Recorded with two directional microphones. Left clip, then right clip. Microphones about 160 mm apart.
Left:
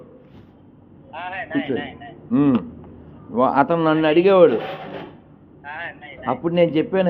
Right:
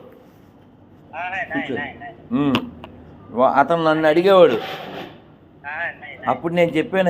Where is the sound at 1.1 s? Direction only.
25° left (ahead or behind).